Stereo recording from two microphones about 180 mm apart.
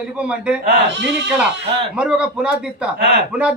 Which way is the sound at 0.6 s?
80° right.